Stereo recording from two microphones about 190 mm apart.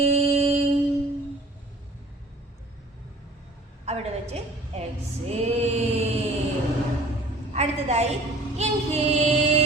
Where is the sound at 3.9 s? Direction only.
35° right (ahead or behind).